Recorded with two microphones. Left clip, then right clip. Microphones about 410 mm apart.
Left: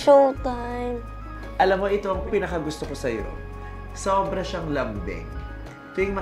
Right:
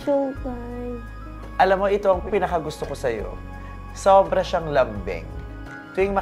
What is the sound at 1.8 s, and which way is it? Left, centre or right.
Speech, right.